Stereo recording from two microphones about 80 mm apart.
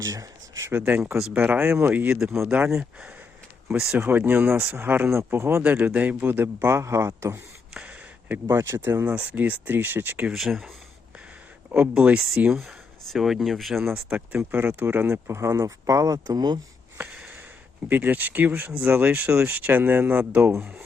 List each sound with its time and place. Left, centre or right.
0.0 s a sound: right
0.7 s speech: right
2.0 s speech: centre
3.9 s speech: right
5.1 s speech: right
5.6 s speech: right
7.7 s a sound: centre
8.3 s speech: right
10.3 s speech: centre
11.9 s speech: centre
12.5 s speech: centre
13.9 s speech: centre; by 16.6 s right
17.8 s speech: right